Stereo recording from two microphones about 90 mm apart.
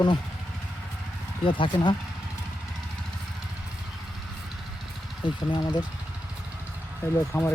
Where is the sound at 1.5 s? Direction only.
65° left (ahead or behind).